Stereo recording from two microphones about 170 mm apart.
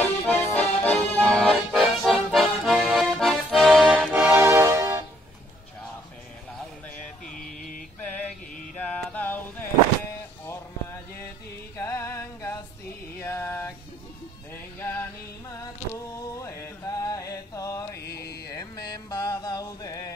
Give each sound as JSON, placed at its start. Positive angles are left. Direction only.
{"t": 0.0, "sound": "accordion", "side_deg": 10}
{"t": 1.8, "sound": "music", "side_deg": -5}
{"t": 2.3, "sound": "accordion", "side_deg": 0}
{"t": 4.2, "sound": "music", "side_deg": -15}
{"t": 7.2, "sound": "mantra", "side_deg": 55}
{"t": 8.7, "sound": "mantra", "side_deg": 10}
{"t": 10.4, "sound": "a sound", "side_deg": 15}
{"t": 11.7, "sound": "music", "side_deg": 20}
{"t": 13.2, "sound": "mantra", "side_deg": 15}
{"t": 14.8, "sound": "mantra", "side_deg": 15}
{"t": 15.5, "sound": "a sound", "side_deg": 15}
{"t": 18.0, "sound": "a sound", "side_deg": 70}
{"t": 18.5, "sound": "music", "side_deg": 25}